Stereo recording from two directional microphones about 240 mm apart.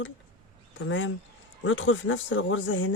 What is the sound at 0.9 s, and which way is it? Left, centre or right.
Speech, left.